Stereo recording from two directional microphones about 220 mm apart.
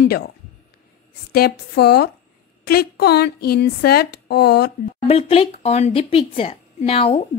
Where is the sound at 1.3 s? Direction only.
45° left (ahead or behind).